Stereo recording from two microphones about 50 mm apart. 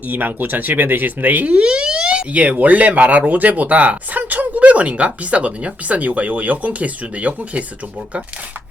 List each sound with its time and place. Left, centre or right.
0.1 s speech: right